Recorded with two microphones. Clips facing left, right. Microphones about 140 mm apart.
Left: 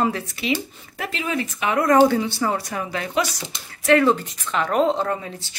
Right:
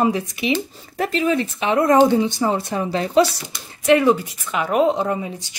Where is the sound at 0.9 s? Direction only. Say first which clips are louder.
Right 7 dB; 40° right (ahead or behind).